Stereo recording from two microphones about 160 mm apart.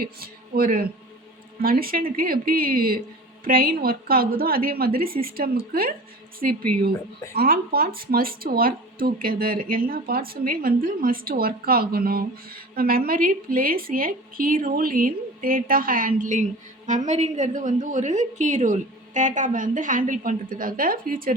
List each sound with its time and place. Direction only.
0.0 s a woman's voice: 70° right (ahead or behind)
6.4 s a woman's voice: 55° right (ahead or behind)
7.3 s a woman's voice: 70° right (ahead or behind)